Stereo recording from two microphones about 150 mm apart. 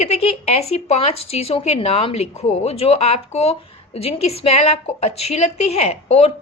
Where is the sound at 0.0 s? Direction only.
45° left (ahead or behind).